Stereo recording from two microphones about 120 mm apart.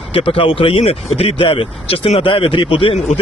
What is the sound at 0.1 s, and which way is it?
A man's voice, 50° left (ahead or behind).